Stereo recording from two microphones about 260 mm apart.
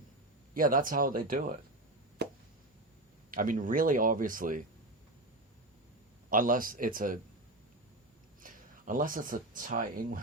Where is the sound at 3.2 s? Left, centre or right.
Right.